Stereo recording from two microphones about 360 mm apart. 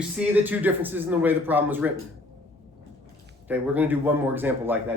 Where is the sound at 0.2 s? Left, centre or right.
Centre.